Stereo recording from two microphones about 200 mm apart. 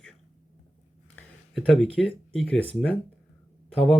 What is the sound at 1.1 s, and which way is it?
Speech, centre (ahead or behind).